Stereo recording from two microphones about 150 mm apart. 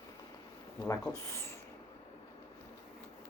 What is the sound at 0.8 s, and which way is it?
Speech, 20° left (ahead or behind).